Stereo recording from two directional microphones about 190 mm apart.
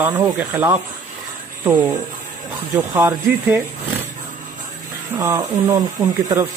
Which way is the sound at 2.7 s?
15° right (ahead or behind).